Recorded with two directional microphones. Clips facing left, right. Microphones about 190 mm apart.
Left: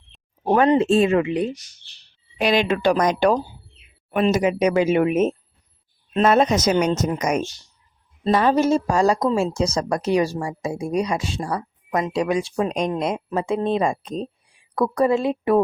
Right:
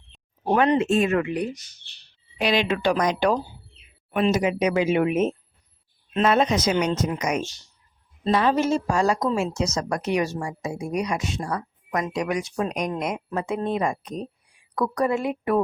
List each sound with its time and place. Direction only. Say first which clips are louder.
0.7 s speech: left 4 dB; 30° left (ahead or behind)
2.4 s speech: left 3 dB; 45° left (ahead or behind); by 15.6 s 25° left (ahead or behind)